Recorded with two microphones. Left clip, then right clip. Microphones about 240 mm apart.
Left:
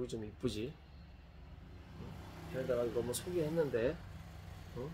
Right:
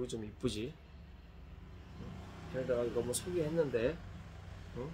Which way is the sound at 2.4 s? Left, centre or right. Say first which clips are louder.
Right 1 dB; left.